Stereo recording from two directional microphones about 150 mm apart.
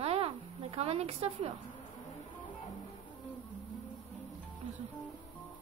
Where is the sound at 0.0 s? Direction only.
40° right (ahead or behind).